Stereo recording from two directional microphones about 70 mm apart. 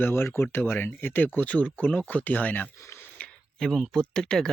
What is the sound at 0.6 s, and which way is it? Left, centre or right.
Speech, left.